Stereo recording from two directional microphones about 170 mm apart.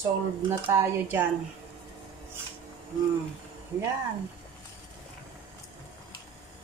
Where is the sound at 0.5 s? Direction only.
15° right (ahead or behind).